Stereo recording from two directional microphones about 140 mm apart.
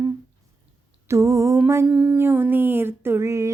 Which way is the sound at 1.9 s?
10° right (ahead or behind).